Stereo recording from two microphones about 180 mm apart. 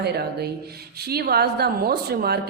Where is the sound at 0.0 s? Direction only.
65° right (ahead or behind).